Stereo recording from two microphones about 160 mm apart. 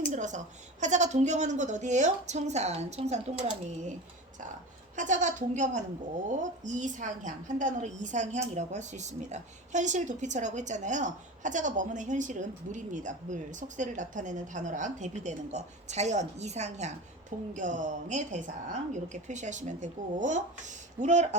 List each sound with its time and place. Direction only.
0.1 s a woman's voice: 50° right (ahead or behind)
4.9 s a woman's voice: 50° right (ahead or behind)